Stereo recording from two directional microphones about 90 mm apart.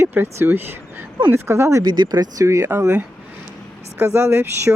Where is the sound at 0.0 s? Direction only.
25° right (ahead or behind).